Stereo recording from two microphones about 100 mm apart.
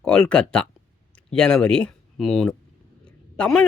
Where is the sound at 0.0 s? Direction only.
10° left (ahead or behind).